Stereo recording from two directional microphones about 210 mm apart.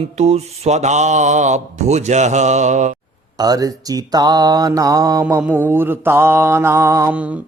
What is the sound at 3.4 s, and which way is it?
Mantra, 20° right (ahead or behind).